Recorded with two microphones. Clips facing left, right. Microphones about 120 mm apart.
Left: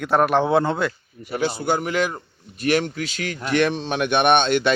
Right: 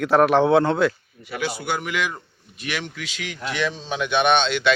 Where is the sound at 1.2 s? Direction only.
35° left (ahead or behind).